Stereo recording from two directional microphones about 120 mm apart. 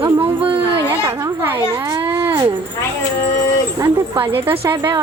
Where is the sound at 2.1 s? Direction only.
15° right (ahead or behind).